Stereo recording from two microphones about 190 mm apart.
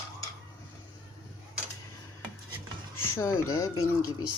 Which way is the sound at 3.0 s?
15° left (ahead or behind).